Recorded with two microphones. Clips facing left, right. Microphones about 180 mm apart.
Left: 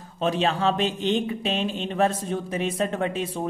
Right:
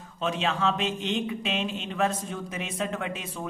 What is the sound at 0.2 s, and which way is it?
Speech, 35° left (ahead or behind).